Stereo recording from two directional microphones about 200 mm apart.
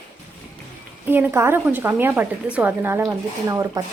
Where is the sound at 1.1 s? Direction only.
10° right (ahead or behind).